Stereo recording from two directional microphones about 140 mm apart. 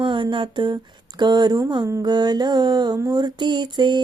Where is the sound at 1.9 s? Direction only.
30° right (ahead or behind).